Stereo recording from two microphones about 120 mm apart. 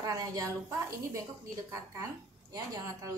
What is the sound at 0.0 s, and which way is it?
A woman's voice, 30° right (ahead or behind).